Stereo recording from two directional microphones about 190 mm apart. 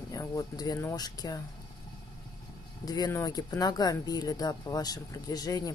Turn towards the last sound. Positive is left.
turn(degrees=20)  # may be behind; listen again after turning